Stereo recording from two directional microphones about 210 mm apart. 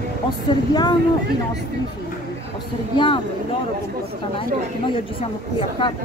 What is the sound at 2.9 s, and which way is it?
Speech, 25° left (ahead or behind).